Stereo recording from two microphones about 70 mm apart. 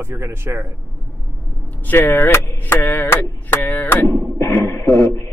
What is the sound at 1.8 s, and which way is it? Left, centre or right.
Speech, left.